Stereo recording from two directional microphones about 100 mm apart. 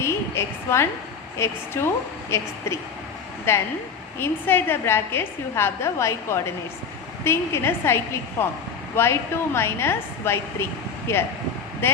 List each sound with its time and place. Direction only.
0.0 s a sound: 25° left (ahead or behind)
1.4 s a woman's voice: 25° left (ahead or behind)
3.5 s a woman's voice: 25° left (ahead or behind)